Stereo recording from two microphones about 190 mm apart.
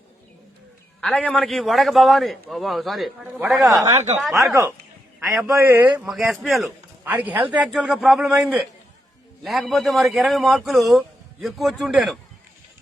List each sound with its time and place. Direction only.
1.0 s a man's voice: 5° left (ahead or behind)
3.9 s speech: 35° right (ahead or behind)
5.2 s a man's voice: centre (ahead or behind)
5.5 s a man's voice: 15° right (ahead or behind)
6.1 s a man's voice: centre (ahead or behind)